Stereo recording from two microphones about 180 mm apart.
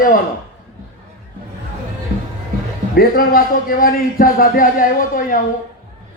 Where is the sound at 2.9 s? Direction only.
55° left (ahead or behind).